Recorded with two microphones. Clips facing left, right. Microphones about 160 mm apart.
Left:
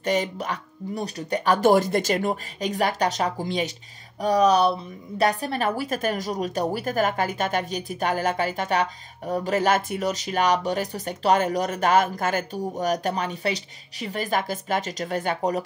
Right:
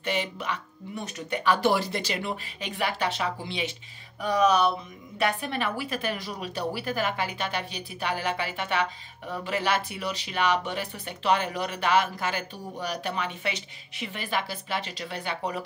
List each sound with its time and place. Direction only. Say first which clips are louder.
0.0 s a woman's voice: left 5 dB; 40° left (ahead or behind)